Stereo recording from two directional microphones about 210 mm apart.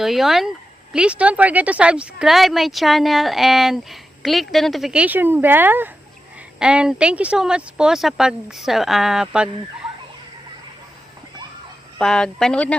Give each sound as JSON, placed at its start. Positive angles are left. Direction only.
{"t": 0.0, "sound": "speech", "side_deg": 0}
{"t": 11.9, "sound": "speech", "side_deg": 5}